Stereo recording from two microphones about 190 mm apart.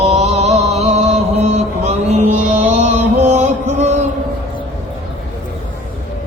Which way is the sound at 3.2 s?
35° right (ahead or behind).